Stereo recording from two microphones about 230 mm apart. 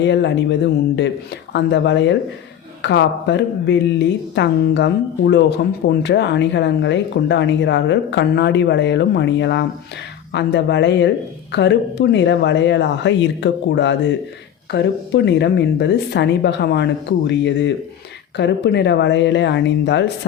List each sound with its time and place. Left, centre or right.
0.0 s speech: left